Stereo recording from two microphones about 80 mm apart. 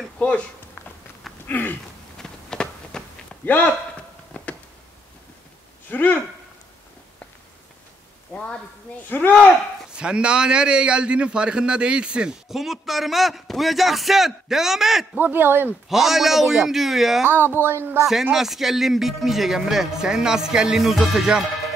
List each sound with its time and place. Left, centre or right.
1.5 s speech: left
2.1 s a sound: centre
3.4 s speech: left
4.3 s a sound: centre
5.9 s speech: left
8.3 s speech: centre
9.9 s a man's voice: centre
15.1 s speech: right
15.9 s speech: centre
17.2 s speech: right
18.3 s speech: centre